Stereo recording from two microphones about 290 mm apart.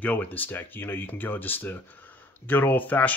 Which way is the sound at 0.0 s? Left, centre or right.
Centre.